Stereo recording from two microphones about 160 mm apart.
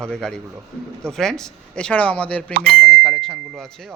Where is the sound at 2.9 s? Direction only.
5° left (ahead or behind).